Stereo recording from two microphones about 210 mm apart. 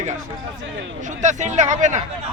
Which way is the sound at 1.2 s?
35° right (ahead or behind).